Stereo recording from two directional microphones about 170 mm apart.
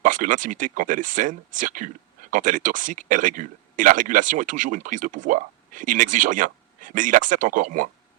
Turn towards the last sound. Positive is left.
turn(degrees=-50)  # may be behind; listen again after turning